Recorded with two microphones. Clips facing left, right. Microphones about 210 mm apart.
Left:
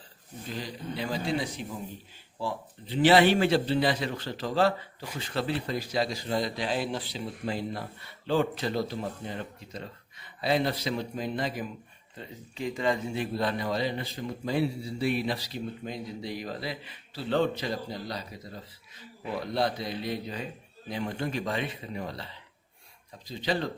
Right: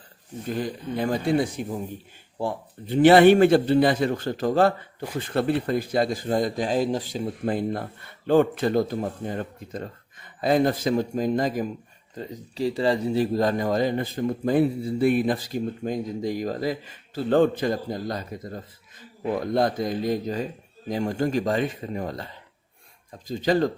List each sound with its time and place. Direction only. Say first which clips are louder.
0.4 s speech: right 8 dB; 50° right (ahead or behind)